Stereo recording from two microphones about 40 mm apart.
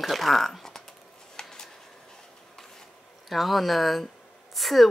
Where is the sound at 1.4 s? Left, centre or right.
Centre.